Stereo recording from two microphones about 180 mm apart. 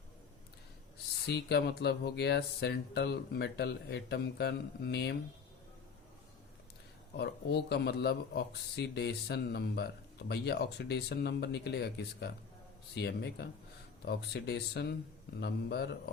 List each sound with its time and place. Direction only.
1.3 s speech: 65° left (ahead or behind)
7.2 s a man's voice: 65° left (ahead or behind)